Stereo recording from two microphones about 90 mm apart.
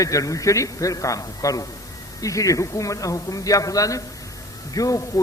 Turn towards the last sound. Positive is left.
turn(degrees=40)  # may be behind; listen again after turning